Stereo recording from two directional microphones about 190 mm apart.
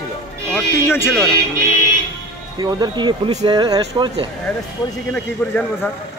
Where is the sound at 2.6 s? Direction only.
20° right (ahead or behind).